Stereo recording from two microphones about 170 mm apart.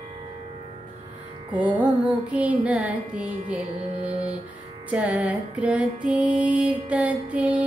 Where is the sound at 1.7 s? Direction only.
25° right (ahead or behind).